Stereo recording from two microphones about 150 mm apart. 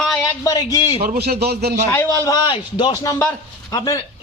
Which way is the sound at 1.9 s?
20° left (ahead or behind).